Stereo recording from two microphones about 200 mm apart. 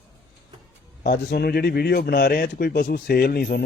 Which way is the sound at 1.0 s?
50° left (ahead or behind).